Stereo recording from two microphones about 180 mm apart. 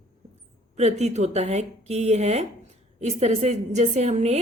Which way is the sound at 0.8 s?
40° right (ahead or behind).